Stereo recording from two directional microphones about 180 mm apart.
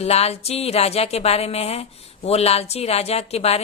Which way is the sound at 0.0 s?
35° left (ahead or behind).